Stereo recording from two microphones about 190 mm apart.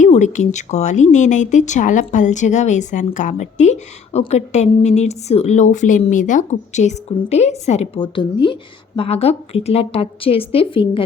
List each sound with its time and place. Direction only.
0.0 s speech: 40° left (ahead or behind)